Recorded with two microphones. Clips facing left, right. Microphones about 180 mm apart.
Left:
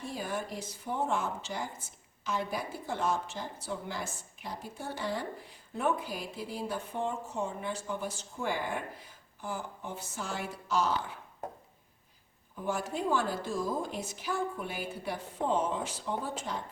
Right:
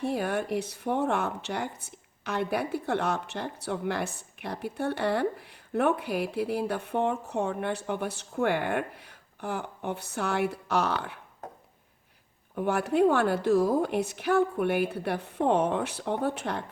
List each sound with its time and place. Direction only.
0.0 s speech: 65° right (ahead or behind)
12.5 s speech: 65° right (ahead or behind)